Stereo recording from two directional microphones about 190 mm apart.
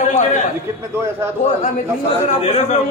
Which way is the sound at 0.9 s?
15° right (ahead or behind).